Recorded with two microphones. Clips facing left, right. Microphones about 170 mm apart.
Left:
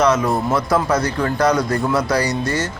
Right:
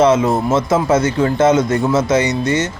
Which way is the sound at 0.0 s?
25° right (ahead or behind).